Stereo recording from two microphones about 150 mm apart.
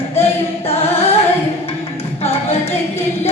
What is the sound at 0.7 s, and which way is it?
Chant, 40° left (ahead or behind).